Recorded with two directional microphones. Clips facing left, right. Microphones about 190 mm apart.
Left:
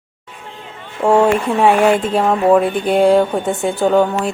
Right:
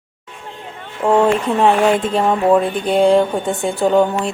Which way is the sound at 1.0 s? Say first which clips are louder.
Left 1 dB; 10° left (ahead or behind).